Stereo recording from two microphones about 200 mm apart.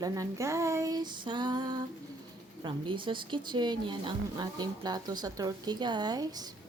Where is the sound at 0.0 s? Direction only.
15° right (ahead or behind).